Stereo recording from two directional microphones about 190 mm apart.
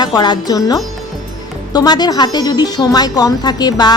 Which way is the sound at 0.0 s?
20° left (ahead or behind).